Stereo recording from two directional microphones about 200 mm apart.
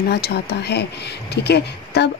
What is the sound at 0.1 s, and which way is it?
Speech, 55° left (ahead or behind).